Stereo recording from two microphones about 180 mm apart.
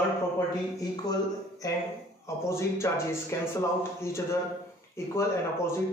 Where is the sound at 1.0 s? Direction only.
20° left (ahead or behind).